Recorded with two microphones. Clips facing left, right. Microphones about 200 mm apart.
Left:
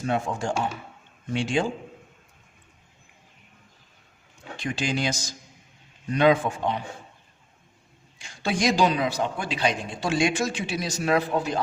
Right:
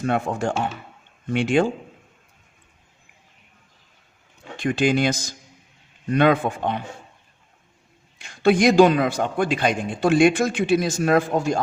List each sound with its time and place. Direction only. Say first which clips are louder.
0.0 s speech: right 4 dB; 60° right (ahead or behind)
4.5 s speech: right 8 dB; 55° right (ahead or behind)
8.2 s a man's voice: right 8 dB; 60° right (ahead or behind)